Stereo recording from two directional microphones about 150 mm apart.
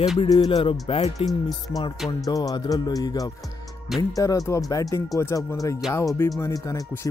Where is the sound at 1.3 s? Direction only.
Centre (ahead or behind).